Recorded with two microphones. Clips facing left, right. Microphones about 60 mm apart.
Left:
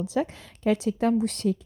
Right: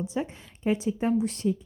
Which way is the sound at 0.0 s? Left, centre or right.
Left.